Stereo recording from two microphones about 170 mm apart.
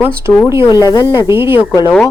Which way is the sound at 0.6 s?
25° left (ahead or behind).